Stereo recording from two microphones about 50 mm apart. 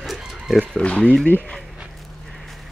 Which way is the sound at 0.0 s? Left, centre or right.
Centre.